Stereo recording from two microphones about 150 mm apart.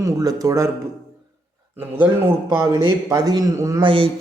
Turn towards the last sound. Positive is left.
turn(degrees=-35)  # may be behind; listen again after turning